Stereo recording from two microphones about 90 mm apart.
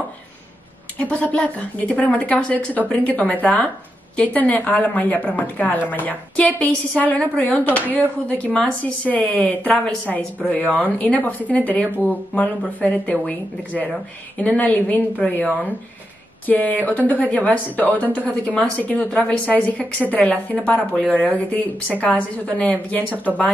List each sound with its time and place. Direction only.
0.9 s a woman's voice: 15° left (ahead or behind)
14.4 s a woman's voice: 15° left (ahead or behind)